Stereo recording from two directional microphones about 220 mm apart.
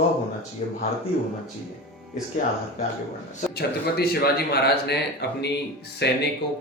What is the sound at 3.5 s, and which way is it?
Speech, 45° left (ahead or behind).